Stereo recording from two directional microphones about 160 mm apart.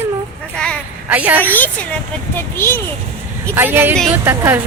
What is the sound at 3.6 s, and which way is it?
Speech, 15° right (ahead or behind).